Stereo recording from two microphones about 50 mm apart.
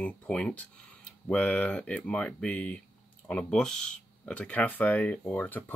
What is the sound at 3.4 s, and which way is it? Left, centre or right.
Speech, centre.